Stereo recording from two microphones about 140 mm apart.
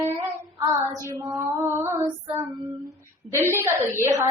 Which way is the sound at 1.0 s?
20° right (ahead or behind).